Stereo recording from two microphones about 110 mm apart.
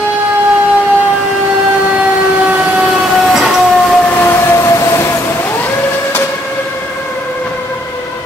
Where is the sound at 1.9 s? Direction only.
10° right (ahead or behind); by 4.1 s 5° left (ahead or behind).